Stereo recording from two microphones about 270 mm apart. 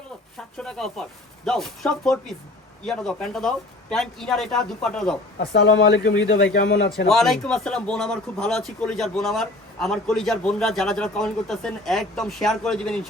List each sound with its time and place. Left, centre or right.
0.6 s speech: centre
5.4 s speech: left
7.1 s speech: centre